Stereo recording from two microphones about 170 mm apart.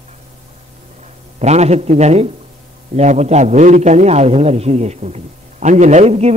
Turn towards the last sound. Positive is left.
turn(degrees=-40)  # may be behind; listen again after turning